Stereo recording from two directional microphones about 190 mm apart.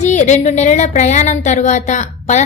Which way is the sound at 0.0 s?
40° left (ahead or behind).